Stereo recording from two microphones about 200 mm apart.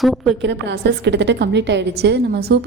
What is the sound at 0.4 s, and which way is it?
A woman's voice, 60° right (ahead or behind).